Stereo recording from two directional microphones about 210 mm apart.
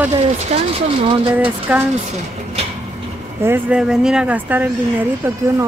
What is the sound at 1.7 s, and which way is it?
Speech, 5° right (ahead or behind).